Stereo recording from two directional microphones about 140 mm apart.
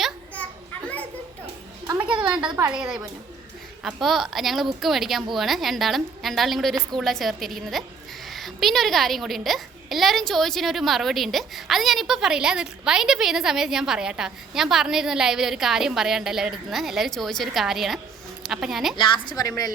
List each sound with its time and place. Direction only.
2.6 s a woman's voice: 10° right (ahead or behind)
18.9 s a woman's voice: 35° left (ahead or behind)